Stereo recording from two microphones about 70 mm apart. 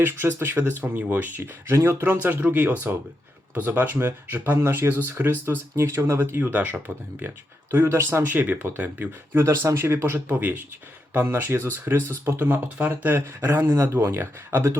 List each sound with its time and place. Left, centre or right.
0.0 s speech: right
1.7 s speech: right
4.5 s speech: right
9.5 s speech: right